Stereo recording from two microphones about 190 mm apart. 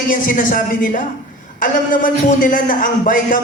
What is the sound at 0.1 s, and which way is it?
A man's voice, 45° left (ahead or behind).